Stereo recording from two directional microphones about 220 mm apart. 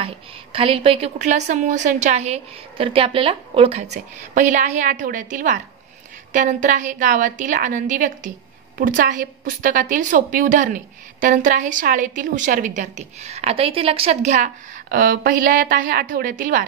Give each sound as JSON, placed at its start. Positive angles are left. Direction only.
{"t": 0.0, "sound": "a woman's voice", "side_deg": -25}